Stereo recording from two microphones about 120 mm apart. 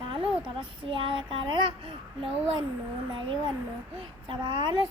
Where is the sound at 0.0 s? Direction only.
45° right (ahead or behind).